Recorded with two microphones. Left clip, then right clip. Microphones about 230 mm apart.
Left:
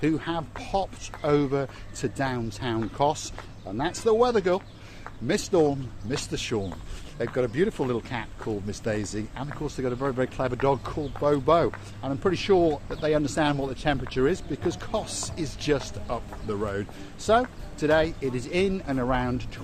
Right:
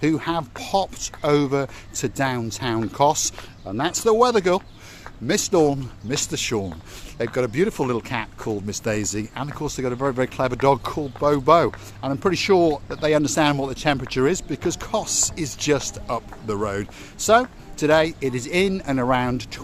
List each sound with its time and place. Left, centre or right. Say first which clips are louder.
0.0 s speech: right 5 dB; right